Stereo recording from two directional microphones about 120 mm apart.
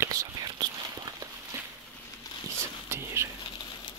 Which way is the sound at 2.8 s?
20° right (ahead or behind).